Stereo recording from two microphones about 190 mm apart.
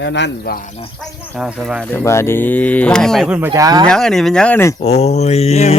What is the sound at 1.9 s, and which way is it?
Speech, 10° left (ahead or behind).